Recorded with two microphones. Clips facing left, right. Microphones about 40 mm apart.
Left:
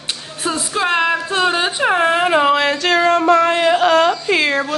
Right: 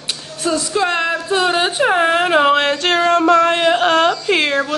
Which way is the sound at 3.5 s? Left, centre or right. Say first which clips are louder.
Left 1 dB; right.